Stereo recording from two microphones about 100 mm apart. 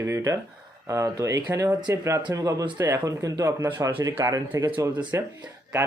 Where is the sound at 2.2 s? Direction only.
40° right (ahead or behind).